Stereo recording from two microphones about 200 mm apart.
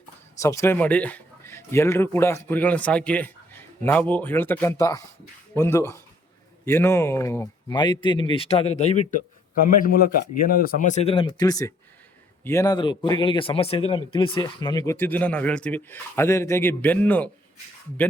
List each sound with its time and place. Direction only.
0.3 s speech: 15° left (ahead or behind); by 9.2 s 35° left (ahead or behind)
10.6 s speech: 45° left (ahead or behind); by 17.3 s 5° left (ahead or behind)